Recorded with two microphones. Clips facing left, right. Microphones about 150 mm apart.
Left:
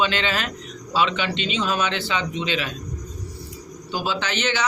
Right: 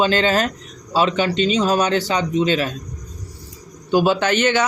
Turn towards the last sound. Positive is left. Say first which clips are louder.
# right 8 dB
turn(degrees=-50)  # may be behind; listen again after turning